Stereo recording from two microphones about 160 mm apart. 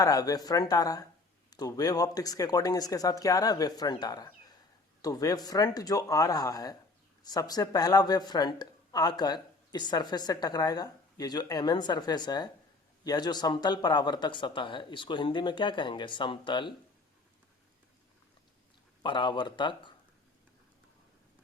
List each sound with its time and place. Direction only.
0.0 s speech: 20° left (ahead or behind)
19.0 s speech: 30° left (ahead or behind)